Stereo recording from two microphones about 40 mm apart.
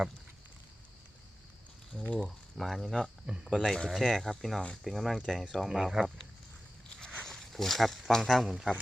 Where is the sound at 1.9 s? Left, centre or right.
Centre.